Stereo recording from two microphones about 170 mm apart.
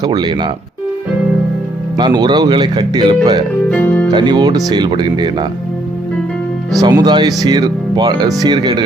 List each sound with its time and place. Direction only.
0.0 s speech: 25° right (ahead or behind)
2.0 s speech: 25° right (ahead or behind)
3.7 s music: 10° left (ahead or behind)
4.1 s speech: 25° right (ahead or behind)
6.8 s speech: 25° right (ahead or behind)